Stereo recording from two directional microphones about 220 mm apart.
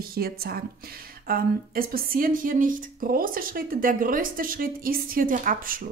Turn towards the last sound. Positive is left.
turn(degrees=-40)  # may be behind; listen again after turning